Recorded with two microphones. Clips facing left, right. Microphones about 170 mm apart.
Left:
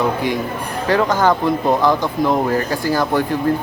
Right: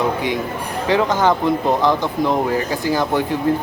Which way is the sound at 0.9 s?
20° right (ahead or behind).